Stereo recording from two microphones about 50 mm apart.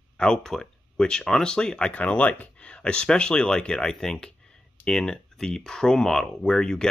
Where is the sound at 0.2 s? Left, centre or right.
Centre.